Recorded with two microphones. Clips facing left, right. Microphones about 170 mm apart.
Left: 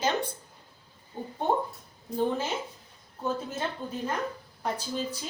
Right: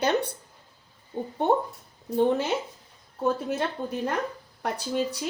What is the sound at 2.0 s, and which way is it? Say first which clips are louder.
Speech: right 5 dB; 65° right (ahead or behind).